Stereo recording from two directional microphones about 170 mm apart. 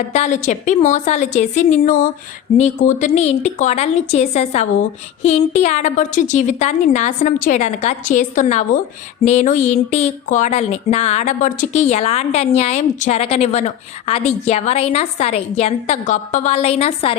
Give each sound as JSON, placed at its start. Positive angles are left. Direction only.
{"t": 0.1, "sound": "speech", "side_deg": 45}